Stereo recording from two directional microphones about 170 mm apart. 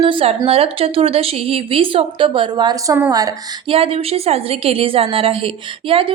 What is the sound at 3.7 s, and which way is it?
A woman's voice, 35° right (ahead or behind).